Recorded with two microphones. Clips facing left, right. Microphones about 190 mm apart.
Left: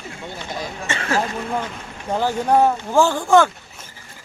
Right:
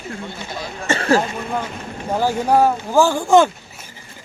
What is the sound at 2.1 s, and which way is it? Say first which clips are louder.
Speech: right 1 dB; 5° right (ahead or behind).